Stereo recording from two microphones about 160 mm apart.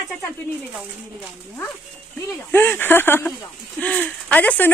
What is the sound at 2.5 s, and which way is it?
Speech, 10° left (ahead or behind).